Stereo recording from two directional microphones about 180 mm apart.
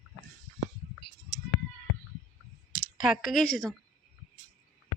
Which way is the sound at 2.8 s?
Centre (ahead or behind).